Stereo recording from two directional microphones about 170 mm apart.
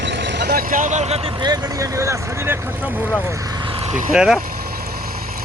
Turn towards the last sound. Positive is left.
turn(degrees=-5)  # may be behind; listen again after turning